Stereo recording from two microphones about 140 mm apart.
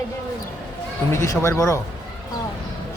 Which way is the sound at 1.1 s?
20° left (ahead or behind).